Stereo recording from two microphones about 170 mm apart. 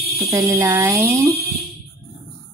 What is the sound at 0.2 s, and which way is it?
Speech, 20° right (ahead or behind).